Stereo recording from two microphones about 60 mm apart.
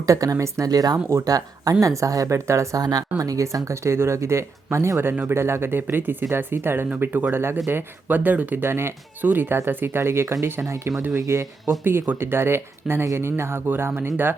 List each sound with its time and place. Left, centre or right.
0.0 s speech: right
1.1 s speech: right
1.8 s speech: right
2.7 s speech: right
3.2 s speech: right
10.6 s speech: right
11.8 s speech: right